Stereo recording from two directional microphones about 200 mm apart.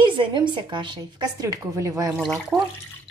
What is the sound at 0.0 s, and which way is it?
A woman's voice, 25° right (ahead or behind).